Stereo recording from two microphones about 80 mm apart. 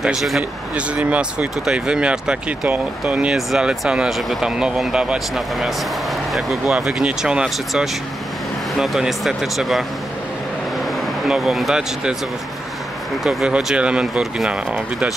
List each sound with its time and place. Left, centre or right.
0.0 s speech: centre
0.4 s speech: centre
3.3 s speech: centre
11.2 s speech: centre
13.2 s speech: centre